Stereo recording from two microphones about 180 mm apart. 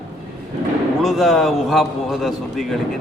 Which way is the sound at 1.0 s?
Centre (ahead or behind).